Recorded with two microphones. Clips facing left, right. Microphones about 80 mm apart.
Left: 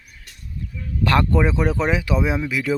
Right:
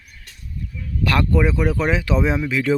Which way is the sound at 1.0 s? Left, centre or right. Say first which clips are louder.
Left 1 dB; left.